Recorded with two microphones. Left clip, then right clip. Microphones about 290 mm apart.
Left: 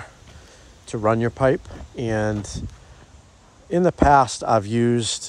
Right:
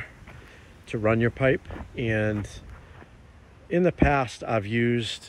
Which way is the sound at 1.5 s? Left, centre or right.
Left.